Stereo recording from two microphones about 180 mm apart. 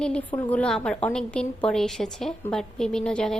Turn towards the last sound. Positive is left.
turn(degrees=5)  # may be behind; listen again after turning